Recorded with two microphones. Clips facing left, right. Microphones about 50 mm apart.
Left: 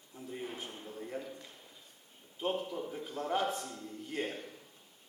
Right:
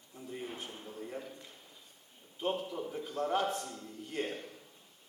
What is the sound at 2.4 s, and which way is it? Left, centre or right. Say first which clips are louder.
A man's voice: even; centre.